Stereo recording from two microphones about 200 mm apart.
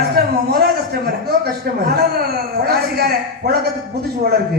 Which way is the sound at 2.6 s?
50° right (ahead or behind).